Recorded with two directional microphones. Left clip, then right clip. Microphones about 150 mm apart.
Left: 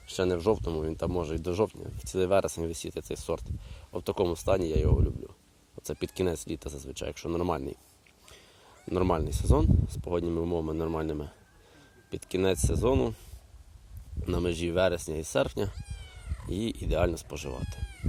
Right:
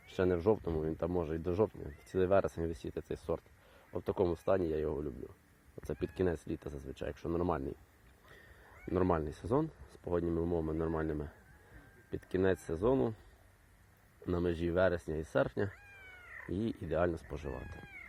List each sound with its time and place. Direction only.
0.1 s speech: 10° left (ahead or behind)
8.9 s speech: 15° left (ahead or behind)
14.3 s speech: 15° left (ahead or behind)